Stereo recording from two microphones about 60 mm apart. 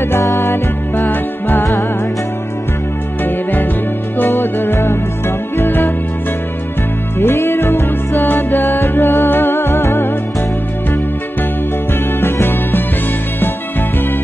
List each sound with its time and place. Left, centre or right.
0.1 s music: left
1.6 s music: left
4.2 s music: left
7.2 s music: left
12.2 s music: left